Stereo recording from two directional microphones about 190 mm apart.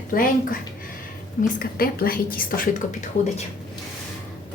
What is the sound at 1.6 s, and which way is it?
A woman's voice, 50° left (ahead or behind).